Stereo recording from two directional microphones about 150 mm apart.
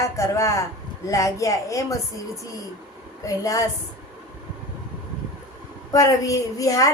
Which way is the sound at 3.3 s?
25° left (ahead or behind).